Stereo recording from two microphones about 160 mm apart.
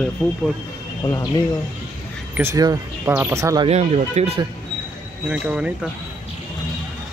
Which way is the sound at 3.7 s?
40° right (ahead or behind).